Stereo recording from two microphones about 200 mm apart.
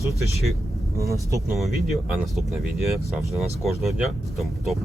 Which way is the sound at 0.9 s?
15° right (ahead or behind).